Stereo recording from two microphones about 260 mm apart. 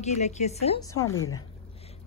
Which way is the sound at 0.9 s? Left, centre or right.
Centre.